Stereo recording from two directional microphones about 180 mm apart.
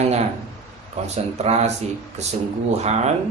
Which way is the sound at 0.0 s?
35° right (ahead or behind).